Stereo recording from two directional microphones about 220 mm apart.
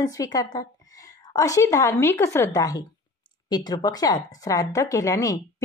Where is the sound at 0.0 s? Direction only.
15° left (ahead or behind).